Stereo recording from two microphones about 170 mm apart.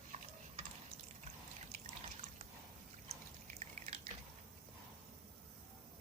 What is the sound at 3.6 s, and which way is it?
Drip, 40° right (ahead or behind).